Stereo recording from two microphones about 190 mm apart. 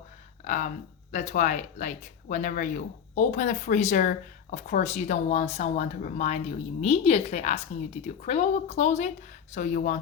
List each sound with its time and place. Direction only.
0.4 s speech: 40° left (ahead or behind)